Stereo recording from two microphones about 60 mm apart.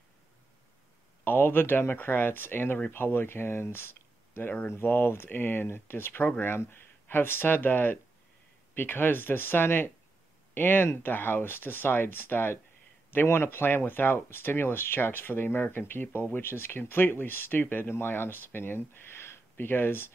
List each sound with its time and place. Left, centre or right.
1.2 s speech: left